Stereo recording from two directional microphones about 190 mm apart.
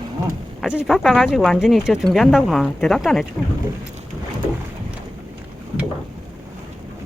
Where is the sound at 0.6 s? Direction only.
5° right (ahead or behind).